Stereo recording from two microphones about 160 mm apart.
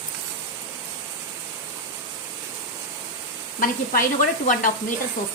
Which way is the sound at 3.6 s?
55° left (ahead or behind).